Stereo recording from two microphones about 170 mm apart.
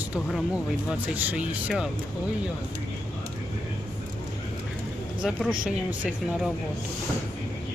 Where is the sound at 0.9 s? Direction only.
10° right (ahead or behind).